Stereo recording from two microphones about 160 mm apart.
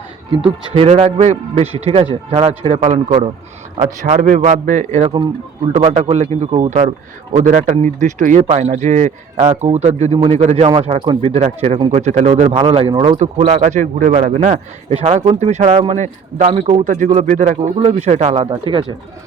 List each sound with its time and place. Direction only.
0.4 s speech: 35° right (ahead or behind)
4.0 s speech: 55° right (ahead or behind); by 13.1 s 30° right (ahead or behind)
13.1 s speech: 45° right (ahead or behind)
14.3 s speech: 40° right (ahead or behind)
18.4 s speech: 30° right (ahead or behind)